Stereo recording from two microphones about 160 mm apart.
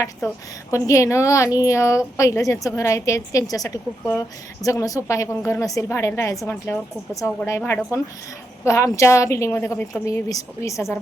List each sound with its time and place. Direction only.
0.7 s a woman's voice: 20° left (ahead or behind)